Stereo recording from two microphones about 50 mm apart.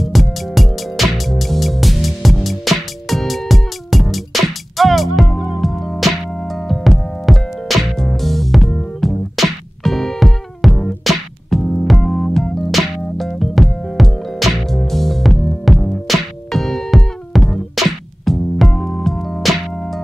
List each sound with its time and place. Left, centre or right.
0.0 s music: centre
11.6 s keyboard: centre
11.9 s keyboard: centre
12.7 s music: centre